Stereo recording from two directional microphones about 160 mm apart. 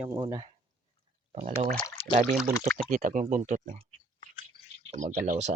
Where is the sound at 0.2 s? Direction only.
20° right (ahead or behind).